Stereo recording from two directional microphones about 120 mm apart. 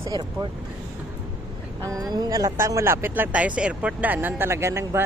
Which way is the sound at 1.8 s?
30° right (ahead or behind).